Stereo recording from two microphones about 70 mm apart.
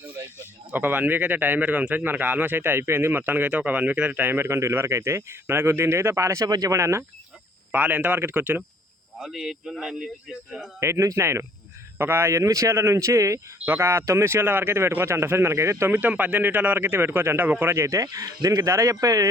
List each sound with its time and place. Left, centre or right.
0.7 s a man's voice: right
6.5 s speech: right
6.7 s a man's voice: right
7.7 s a man's voice: right
9.1 s speech: centre
10.8 s a man's voice: right
13.7 s speech: right
15.9 s a man's voice: right
17.8 s a man's voice: right